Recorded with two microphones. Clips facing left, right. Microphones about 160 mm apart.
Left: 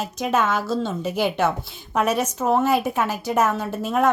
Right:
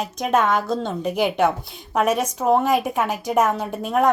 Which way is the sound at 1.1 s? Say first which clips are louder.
Right 3 dB; 15° right (ahead or behind).